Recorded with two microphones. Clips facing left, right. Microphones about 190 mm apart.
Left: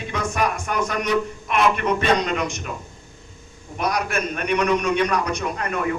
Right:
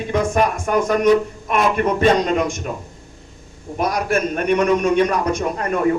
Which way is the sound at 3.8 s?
50° right (ahead or behind).